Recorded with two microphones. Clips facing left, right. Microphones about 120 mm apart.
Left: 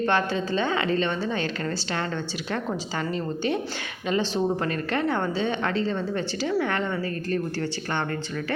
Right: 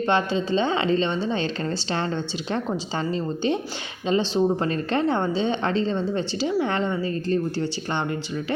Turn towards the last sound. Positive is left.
turn(degrees=-20)  # may be behind; listen again after turning